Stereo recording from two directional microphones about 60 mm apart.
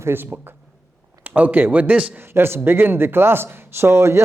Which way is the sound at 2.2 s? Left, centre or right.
Right.